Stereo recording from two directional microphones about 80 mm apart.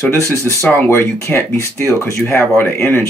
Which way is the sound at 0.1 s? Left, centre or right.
Left.